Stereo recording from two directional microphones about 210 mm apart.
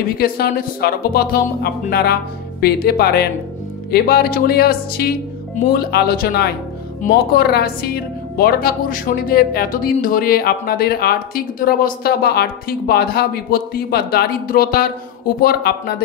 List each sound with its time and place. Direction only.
0.2 s speech: 45° left (ahead or behind)